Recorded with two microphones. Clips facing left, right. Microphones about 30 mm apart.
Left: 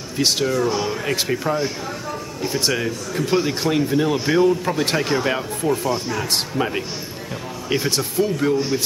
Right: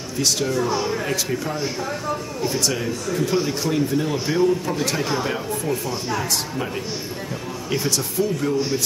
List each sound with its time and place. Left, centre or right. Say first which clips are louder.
0.2 s speech: left 3 dB; left
0.6 s a man's voice: left 1 dB; centre
3.2 s a man's voice: left 3 dB; left
7.7 s a man's voice: left 2 dB; left